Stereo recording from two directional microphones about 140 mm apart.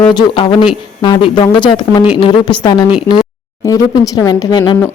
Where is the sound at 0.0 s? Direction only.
35° left (ahead or behind).